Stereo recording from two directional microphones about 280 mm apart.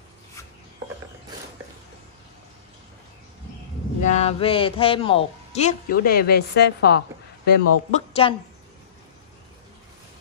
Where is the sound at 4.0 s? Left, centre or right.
Left.